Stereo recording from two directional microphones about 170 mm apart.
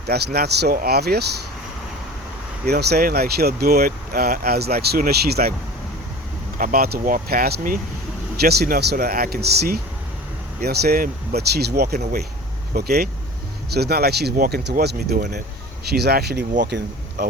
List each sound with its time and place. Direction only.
0.1 s speech: 70° right (ahead or behind)
2.6 s speech: 65° right (ahead or behind)
6.6 s speech: 55° right (ahead or behind)